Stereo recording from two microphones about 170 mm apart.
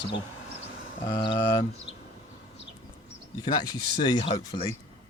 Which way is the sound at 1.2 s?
30° left (ahead or behind).